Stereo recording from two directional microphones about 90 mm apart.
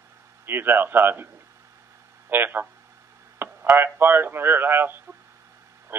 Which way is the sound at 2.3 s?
25° right (ahead or behind).